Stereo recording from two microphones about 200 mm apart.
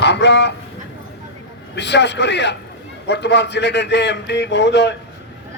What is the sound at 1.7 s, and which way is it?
A man's voice, 60° left (ahead or behind).